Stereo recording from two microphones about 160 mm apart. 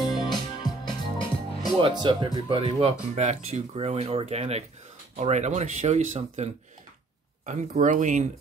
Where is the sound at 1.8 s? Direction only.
30° right (ahead or behind).